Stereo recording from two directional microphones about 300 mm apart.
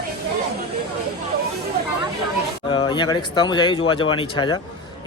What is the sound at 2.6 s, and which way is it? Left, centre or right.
Speech, centre.